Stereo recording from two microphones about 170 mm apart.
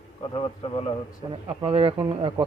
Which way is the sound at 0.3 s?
30° left (ahead or behind).